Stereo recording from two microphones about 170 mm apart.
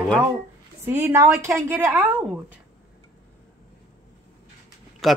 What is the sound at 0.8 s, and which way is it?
Speech, 15° right (ahead or behind).